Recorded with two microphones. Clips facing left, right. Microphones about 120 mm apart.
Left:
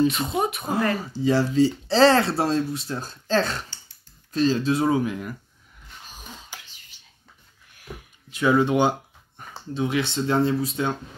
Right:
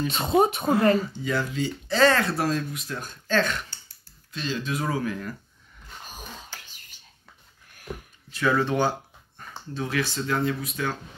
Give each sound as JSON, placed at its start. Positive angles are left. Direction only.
{"t": 0.1, "sound": "speech", "side_deg": -25}
{"t": 1.1, "sound": "speech", "side_deg": 30}
{"t": 6.5, "sound": "cough", "side_deg": 15}
{"t": 7.7, "sound": "a sound", "side_deg": -45}
{"t": 8.3, "sound": "speech", "side_deg": 15}